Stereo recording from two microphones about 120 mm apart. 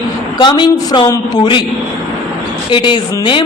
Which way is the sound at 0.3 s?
40° left (ahead or behind).